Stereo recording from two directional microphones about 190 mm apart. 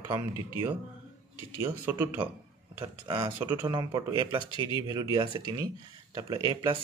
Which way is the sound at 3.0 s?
25° right (ahead or behind).